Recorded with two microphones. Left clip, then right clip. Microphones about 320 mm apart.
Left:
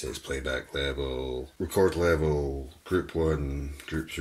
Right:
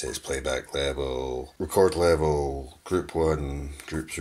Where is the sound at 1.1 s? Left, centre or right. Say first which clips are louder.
Right 3 dB; right.